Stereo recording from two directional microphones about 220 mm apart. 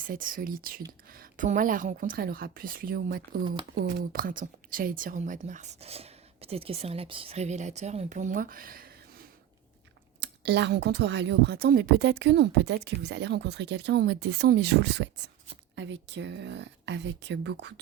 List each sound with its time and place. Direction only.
0.0 s a woman's voice: 40° right (ahead or behind)
10.2 s speech: 50° right (ahead or behind)